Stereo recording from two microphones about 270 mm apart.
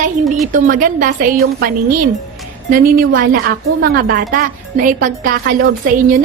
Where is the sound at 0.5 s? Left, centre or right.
Right.